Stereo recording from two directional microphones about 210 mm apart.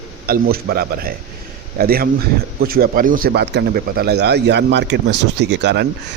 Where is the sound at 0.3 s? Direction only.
45° right (ahead or behind).